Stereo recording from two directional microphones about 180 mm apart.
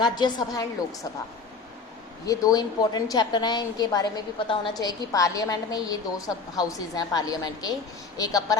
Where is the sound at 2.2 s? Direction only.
20° left (ahead or behind).